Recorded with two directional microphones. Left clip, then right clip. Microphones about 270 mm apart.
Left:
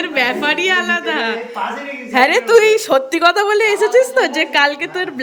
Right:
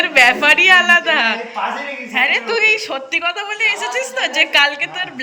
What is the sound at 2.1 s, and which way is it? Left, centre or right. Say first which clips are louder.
Speech: left 3 dB; left.